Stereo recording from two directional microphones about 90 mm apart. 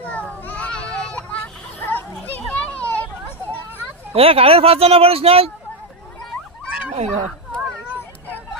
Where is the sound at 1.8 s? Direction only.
20° left (ahead or behind).